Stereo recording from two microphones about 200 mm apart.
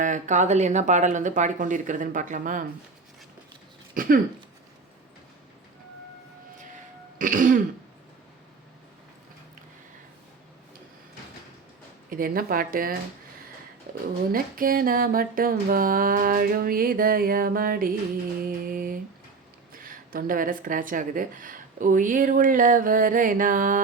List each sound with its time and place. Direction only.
0.0 s speech: 40° right (ahead or behind)
3.9 s speech: 45° right (ahead or behind)
7.2 s speech: 40° right (ahead or behind)
12.1 s speech: 45° right (ahead or behind)
13.9 s a sound: 50° right (ahead or behind)
14.3 s speech: 45° right (ahead or behind)